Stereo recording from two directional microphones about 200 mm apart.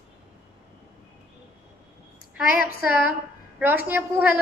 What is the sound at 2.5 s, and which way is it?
Child singing, 45° left (ahead or behind).